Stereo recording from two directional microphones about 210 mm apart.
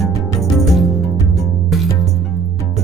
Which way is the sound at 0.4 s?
Centre (ahead or behind).